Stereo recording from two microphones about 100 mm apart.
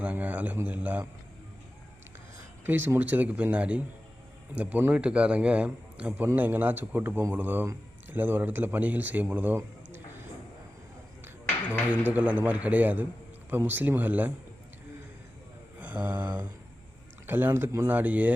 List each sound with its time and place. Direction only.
0.0 s speech: 15° right (ahead or behind)
2.6 s a man's voice: 20° right (ahead or behind)
11.6 s a man's voice: 15° right (ahead or behind)
15.8 s mantra: 15° right (ahead or behind)
17.2 s speech: 20° right (ahead or behind)